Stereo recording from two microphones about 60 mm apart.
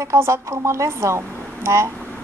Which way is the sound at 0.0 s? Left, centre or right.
Right.